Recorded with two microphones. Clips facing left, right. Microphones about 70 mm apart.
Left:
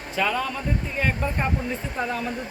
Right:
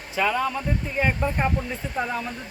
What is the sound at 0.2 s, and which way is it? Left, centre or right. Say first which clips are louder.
Speech: right 2 dB; centre.